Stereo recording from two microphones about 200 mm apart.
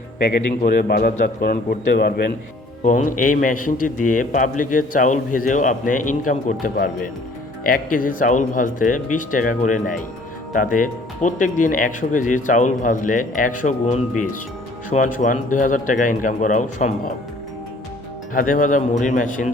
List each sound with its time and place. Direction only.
0.2 s a man's voice: 50° left (ahead or behind)
2.8 s a man's voice: 40° left (ahead or behind)
18.3 s a man's voice: 40° left (ahead or behind)